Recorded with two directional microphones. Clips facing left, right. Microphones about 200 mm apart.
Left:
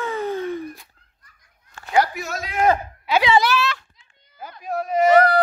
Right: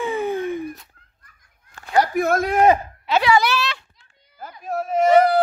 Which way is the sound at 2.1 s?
55° right (ahead or behind).